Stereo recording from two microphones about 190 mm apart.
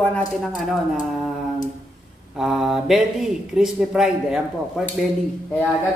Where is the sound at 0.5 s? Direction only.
5° right (ahead or behind).